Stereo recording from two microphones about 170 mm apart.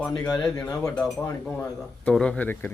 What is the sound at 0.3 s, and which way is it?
A man's voice, 5° left (ahead or behind).